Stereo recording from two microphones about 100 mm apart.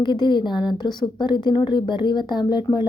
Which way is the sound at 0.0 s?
50° left (ahead or behind).